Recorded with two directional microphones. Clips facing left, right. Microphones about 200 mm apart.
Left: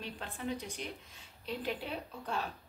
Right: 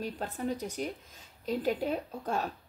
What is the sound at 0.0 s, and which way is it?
Speech, 40° right (ahead or behind).